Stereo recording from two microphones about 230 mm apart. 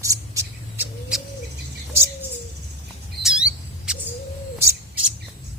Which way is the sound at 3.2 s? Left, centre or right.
Centre.